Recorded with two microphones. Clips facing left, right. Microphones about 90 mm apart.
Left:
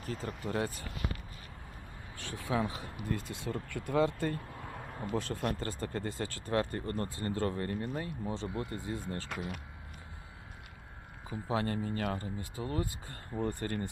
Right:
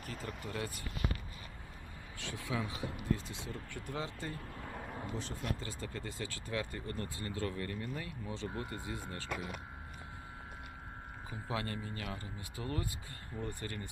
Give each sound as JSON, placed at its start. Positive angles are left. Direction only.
{"t": 0.0, "sound": "speech", "side_deg": 30}
{"t": 2.1, "sound": "speech", "side_deg": 40}
{"t": 3.1, "sound": "speech", "side_deg": 55}
{"t": 4.5, "sound": "a sound", "side_deg": 0}
{"t": 5.1, "sound": "speech", "side_deg": 60}
{"t": 11.3, "sound": "speech", "side_deg": 30}
{"t": 12.4, "sound": "speech", "side_deg": 30}